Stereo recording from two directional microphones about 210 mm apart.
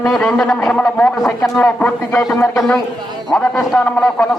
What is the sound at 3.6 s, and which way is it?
Speech, centre (ahead or behind).